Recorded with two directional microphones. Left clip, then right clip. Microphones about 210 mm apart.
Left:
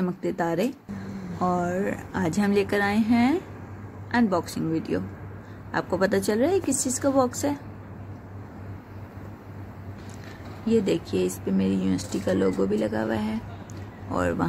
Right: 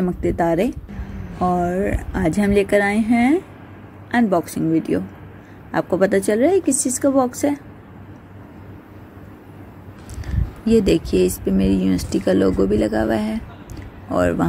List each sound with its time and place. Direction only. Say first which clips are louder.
0.0 s a woman's voice: right 7 dB; 15° right (ahead or behind)
10.6 s speech: right 7 dB; 30° right (ahead or behind)